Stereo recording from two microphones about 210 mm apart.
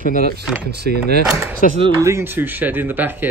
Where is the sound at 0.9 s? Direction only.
50° right (ahead or behind).